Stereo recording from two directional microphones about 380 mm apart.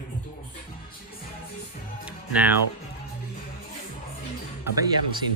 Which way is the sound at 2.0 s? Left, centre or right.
Centre.